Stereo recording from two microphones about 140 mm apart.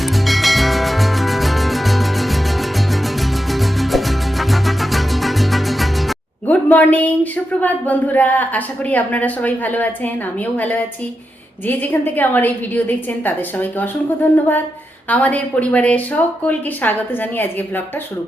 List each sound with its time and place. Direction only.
0.0 s music: centre (ahead or behind)
6.5 s a sound: 10° left (ahead or behind)
7.6 s a woman's voice: 10° left (ahead or behind)